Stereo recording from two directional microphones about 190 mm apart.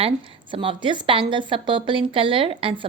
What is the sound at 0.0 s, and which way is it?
A woman's voice, 25° right (ahead or behind).